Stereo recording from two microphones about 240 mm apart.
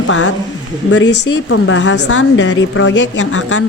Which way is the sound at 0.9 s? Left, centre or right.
Left.